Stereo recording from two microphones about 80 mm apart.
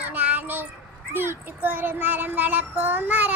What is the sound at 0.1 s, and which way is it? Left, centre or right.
Child singing, centre.